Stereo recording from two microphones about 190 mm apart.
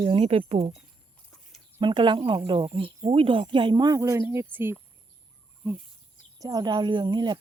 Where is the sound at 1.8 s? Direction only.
25° right (ahead or behind).